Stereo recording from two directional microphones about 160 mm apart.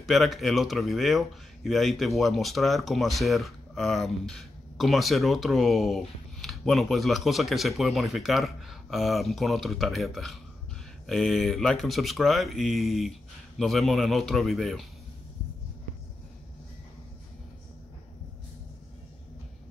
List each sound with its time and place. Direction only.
0.0 s speech: centre (ahead or behind)